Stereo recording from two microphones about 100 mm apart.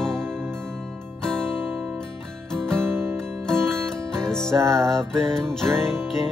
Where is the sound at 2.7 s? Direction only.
25° right (ahead or behind).